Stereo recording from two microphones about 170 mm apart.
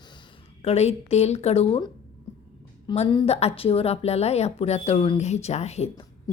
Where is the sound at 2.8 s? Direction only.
35° left (ahead or behind).